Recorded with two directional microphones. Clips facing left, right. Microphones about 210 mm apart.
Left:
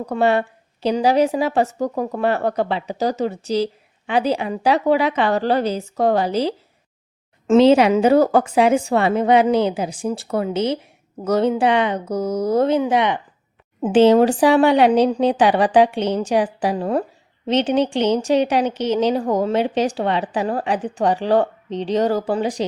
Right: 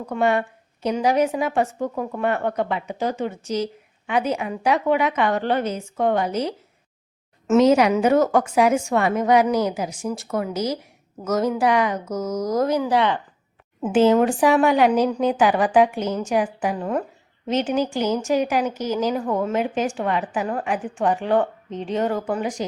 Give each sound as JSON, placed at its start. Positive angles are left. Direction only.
{"t": 0.0, "sound": "a woman's voice", "side_deg": 35}
{"t": 7.5, "sound": "a woman's voice", "side_deg": 30}
{"t": 13.8, "sound": "a woman's voice", "side_deg": 35}